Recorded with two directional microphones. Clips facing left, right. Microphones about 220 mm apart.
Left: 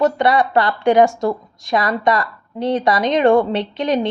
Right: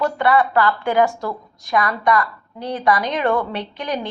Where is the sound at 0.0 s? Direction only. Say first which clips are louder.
Left 2 dB; 20° left (ahead or behind).